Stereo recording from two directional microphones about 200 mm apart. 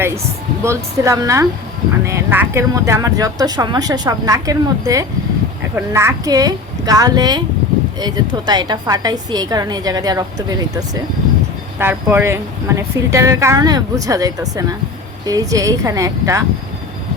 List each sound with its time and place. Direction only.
0.6 s a woman's voice: 15° right (ahead or behind)